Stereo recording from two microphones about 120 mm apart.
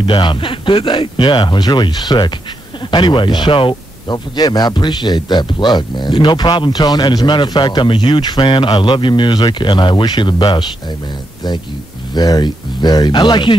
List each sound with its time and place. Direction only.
0.0 s speech: 45° left (ahead or behind)
12.1 s speech: 35° left (ahead or behind)